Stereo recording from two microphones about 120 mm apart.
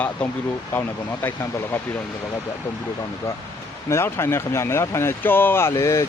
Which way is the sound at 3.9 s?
20° left (ahead or behind).